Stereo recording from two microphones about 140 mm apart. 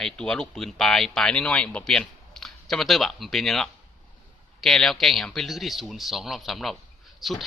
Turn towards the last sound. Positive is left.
turn(degrees=0)  # may be behind; listen again after turning